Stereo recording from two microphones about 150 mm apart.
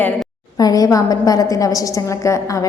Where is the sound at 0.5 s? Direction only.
25° left (ahead or behind).